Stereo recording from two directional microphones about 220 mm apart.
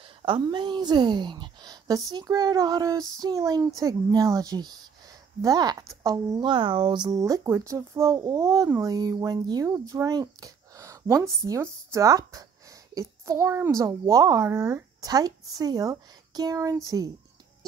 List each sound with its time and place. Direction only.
0.0 s speech: 25° right (ahead or behind)